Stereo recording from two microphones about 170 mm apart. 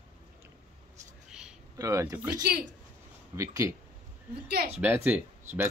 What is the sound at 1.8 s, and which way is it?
Speech, 20° right (ahead or behind).